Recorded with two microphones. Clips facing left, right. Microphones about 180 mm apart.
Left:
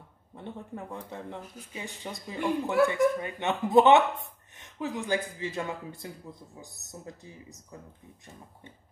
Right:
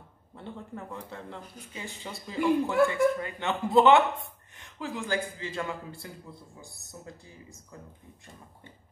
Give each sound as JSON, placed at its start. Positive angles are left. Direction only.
{"t": 0.4, "sound": "speech", "side_deg": 15}